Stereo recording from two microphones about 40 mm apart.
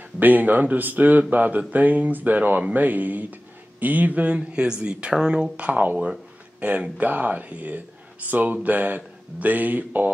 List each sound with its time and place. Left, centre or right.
0.2 s speech: right
5.6 s speech: right